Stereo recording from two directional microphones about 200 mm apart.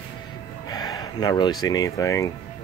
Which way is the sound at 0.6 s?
20° left (ahead or behind).